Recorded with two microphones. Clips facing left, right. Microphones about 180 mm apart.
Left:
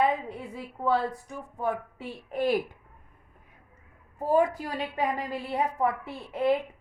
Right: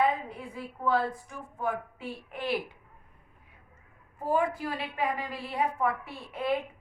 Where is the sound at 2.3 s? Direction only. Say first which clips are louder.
Left 6 dB; 45° left (ahead or behind).